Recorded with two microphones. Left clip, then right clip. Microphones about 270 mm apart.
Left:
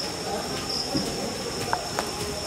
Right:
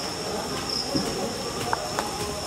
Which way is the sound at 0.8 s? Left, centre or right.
Centre.